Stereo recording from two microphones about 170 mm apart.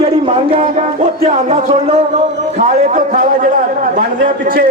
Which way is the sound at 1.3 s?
45° right (ahead or behind).